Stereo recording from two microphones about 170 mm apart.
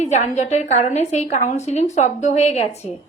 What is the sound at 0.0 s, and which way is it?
A woman's voice, 45° left (ahead or behind).